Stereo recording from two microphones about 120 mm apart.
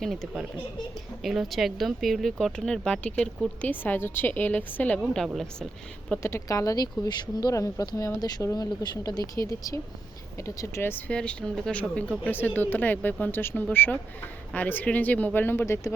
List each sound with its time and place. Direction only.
0.0 s speech: centre (ahead or behind)
5.1 s speech: centre (ahead or behind)
6.2 s speech: 25° left (ahead or behind)